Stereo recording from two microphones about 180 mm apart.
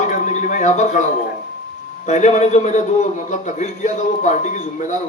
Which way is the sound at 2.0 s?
40° left (ahead or behind).